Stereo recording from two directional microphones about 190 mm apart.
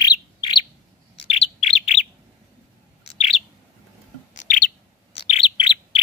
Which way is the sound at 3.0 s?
30° left (ahead or behind).